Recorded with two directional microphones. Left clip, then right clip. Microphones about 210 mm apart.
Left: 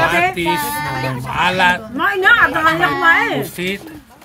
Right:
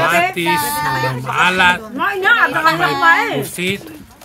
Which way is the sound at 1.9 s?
Centre (ahead or behind).